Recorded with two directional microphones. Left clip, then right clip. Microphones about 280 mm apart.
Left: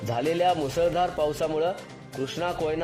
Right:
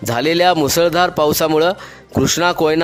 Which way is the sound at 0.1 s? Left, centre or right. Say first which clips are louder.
Right 10 dB; right.